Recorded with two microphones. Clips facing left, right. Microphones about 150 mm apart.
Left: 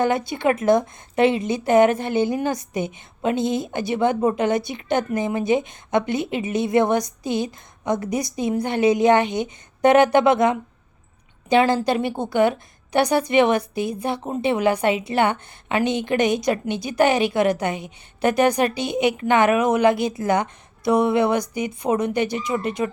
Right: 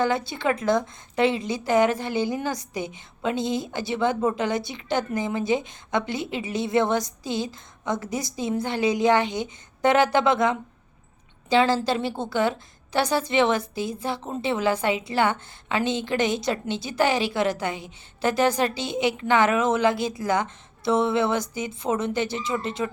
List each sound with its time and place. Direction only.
0.0 s a woman's voice: 20° left (ahead or behind)